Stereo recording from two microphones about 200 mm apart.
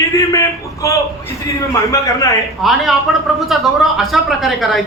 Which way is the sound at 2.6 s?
Centre (ahead or behind).